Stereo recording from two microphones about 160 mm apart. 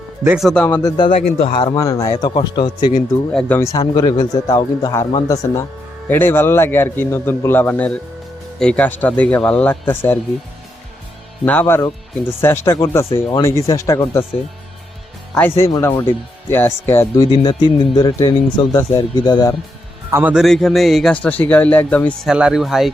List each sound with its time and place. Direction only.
0.3 s speech: centre (ahead or behind)
0.9 s speech: 30° left (ahead or behind)
3.3 s speech: 15° left (ahead or behind)
11.4 s speech: 10° left (ahead or behind)
15.4 s speech: 15° left (ahead or behind)
17.3 s speech: 30° left (ahead or behind)
20.1 s speech: 15° right (ahead or behind)
20.3 s speech: centre (ahead or behind)
22.3 s speech: 5° right (ahead or behind)